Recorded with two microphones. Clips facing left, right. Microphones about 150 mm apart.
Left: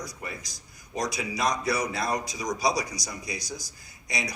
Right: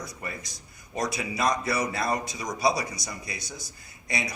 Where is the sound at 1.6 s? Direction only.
5° right (ahead or behind).